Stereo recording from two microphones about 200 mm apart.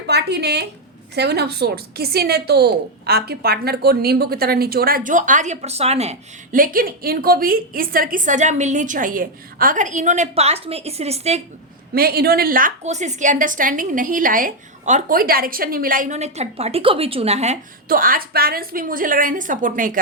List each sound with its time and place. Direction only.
0.1 s a woman's voice: 55° right (ahead or behind); by 11.4 s 35° right (ahead or behind)
11.9 s a woman's voice: 50° right (ahead or behind)